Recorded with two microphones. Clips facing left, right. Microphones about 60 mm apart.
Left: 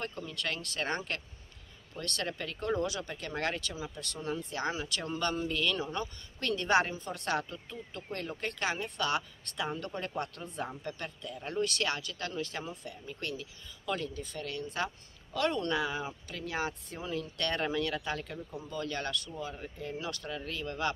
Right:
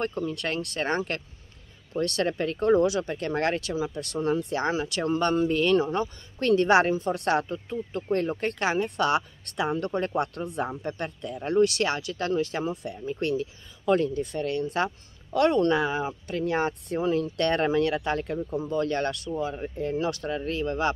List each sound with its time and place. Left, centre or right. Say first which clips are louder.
0.0 s speech: right 9 dB; right
2.0 s speech: right 11 dB; right
3.8 s speech: right 11 dB; right
5.5 s speech: right 10 dB; right
5.8 s speech: right 10 dB; right
6.4 s speech: right 8 dB; right
7.1 s speech: right 9 dB; right
7.5 s speech: right 11 dB; right
8.3 s speech: right 8 dB; right
10.9 s speech: right 8 dB; right
13.2 s speech: right 12 dB; right